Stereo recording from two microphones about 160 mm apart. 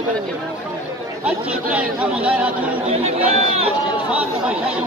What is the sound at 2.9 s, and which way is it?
Speech, 40° right (ahead or behind).